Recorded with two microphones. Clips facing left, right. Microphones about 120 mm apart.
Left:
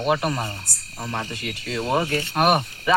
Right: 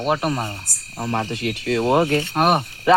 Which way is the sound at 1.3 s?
70° right (ahead or behind).